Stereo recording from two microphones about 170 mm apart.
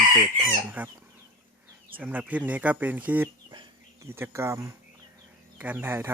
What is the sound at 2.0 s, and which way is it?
Speech, 10° right (ahead or behind).